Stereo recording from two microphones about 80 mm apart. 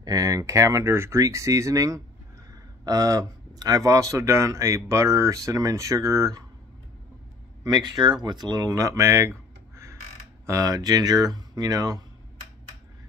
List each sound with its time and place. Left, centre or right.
0.0 s speech: right
7.6 s speech: right
10.4 s speech: right